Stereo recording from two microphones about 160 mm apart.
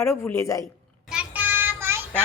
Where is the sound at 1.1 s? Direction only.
10° right (ahead or behind).